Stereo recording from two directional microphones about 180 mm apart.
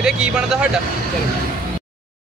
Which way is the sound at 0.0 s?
5° right (ahead or behind).